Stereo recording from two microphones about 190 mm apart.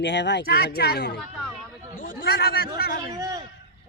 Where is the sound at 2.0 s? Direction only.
55° left (ahead or behind).